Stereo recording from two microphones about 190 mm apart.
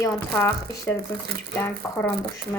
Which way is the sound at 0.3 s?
10° left (ahead or behind).